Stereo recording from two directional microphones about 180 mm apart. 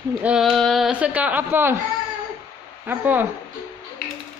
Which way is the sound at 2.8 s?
10° right (ahead or behind).